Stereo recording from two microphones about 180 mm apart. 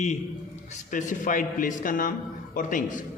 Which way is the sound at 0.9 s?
45° left (ahead or behind).